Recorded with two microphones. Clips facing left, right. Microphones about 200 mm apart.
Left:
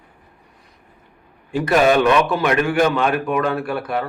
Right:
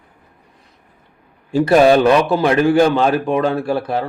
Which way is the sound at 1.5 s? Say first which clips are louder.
Right 5 dB; 30° right (ahead or behind).